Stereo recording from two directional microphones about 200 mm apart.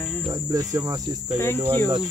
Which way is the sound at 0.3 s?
15° right (ahead or behind).